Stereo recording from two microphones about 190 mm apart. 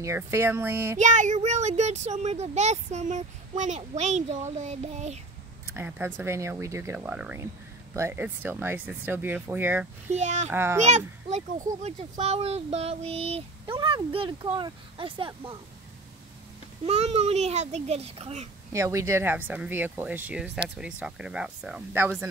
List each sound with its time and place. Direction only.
0.0 s speech: 15° right (ahead or behind)
0.9 s a child's voice: 40° right (ahead or behind)
5.7 s speech: 10° right (ahead or behind)
10.1 s a child's voice: 35° right (ahead or behind)
10.5 s speech: 10° right (ahead or behind)
10.8 s a child's voice: 35° right (ahead or behind)
16.8 s a child's voice: 35° right (ahead or behind)
18.7 s speech: 15° right (ahead or behind)